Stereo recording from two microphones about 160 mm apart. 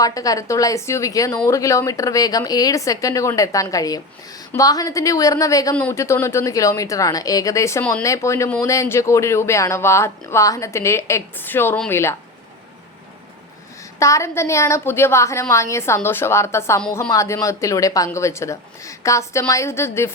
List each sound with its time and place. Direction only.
0.0 s speech: 20° left (ahead or behind)
14.0 s speech: 20° left (ahead or behind)